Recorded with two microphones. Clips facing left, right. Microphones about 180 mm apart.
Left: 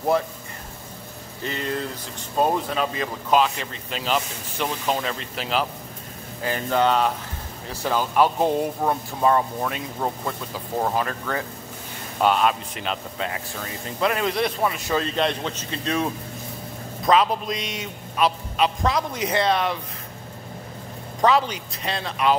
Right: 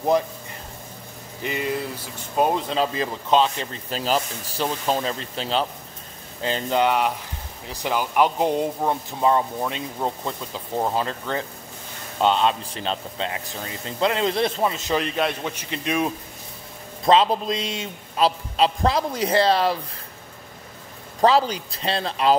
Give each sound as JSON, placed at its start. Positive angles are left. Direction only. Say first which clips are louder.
{"t": 0.1, "sound": "speech", "louder": "right 4 dB", "side_deg": -15}
{"t": 1.4, "sound": "speech", "louder": "right 2 dB", "side_deg": -10}
{"t": 2.7, "sound": "speech", "louder": "right 2 dB", "side_deg": -30}
{"t": 11.0, "sound": "a man's voice", "louder": "even", "side_deg": -25}
{"t": 17.0, "sound": "speech", "louder": "right 2 dB", "side_deg": -25}
{"t": 21.2, "sound": "speech", "louder": "right 2 dB", "side_deg": -35}